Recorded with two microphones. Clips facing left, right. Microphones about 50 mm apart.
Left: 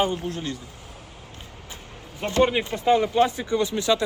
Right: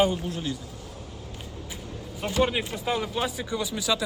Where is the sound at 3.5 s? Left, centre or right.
Left.